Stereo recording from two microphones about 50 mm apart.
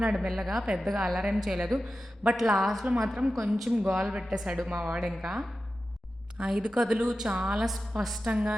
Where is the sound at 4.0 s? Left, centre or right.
Centre.